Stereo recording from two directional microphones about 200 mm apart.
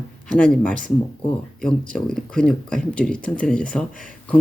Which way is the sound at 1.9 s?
5° left (ahead or behind).